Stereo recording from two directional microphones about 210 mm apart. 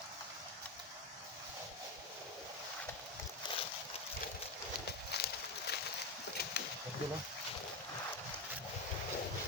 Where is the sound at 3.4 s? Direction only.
20° left (ahead or behind).